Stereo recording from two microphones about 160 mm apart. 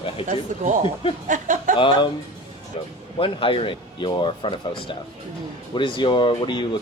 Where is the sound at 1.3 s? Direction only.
55° right (ahead or behind).